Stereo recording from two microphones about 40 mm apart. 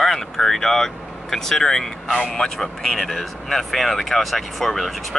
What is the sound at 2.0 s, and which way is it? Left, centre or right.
Speech, centre.